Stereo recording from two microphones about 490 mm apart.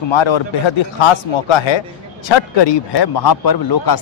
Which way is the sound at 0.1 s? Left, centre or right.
Left.